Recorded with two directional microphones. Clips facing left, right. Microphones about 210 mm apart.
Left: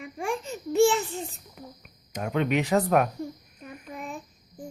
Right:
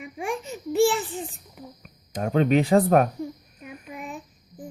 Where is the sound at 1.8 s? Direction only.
35° right (ahead or behind).